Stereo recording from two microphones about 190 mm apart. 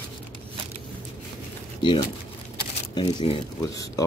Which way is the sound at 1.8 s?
25° left (ahead or behind).